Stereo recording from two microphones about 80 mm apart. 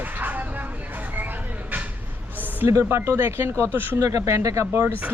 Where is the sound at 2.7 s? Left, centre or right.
Right.